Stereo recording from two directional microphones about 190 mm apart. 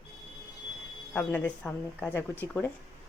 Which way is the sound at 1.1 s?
10° left (ahead or behind).